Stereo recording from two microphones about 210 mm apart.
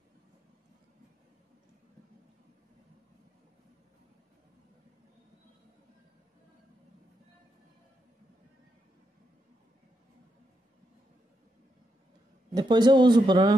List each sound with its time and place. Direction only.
12.5 s a man's voice: 20° right (ahead or behind)